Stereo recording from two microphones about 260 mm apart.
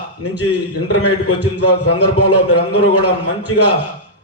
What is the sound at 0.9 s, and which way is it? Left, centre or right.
A man's voice, left.